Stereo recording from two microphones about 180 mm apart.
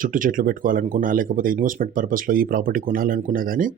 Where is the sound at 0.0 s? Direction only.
50° right (ahead or behind).